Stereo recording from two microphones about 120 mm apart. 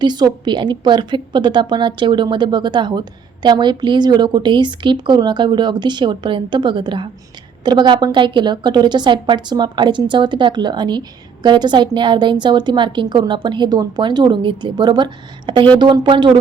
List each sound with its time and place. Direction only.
0.0 s a woman's voice: 35° right (ahead or behind)